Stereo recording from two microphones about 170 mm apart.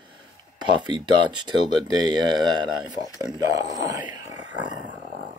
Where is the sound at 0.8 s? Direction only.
25° right (ahead or behind).